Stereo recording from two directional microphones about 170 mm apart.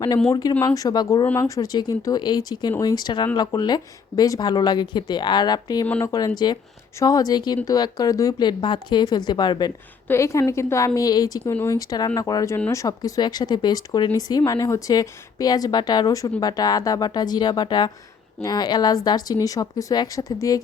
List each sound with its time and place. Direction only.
0.3 s a woman's voice: 20° left (ahead or behind)